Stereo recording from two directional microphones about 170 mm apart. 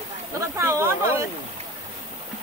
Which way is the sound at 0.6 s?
15° right (ahead or behind).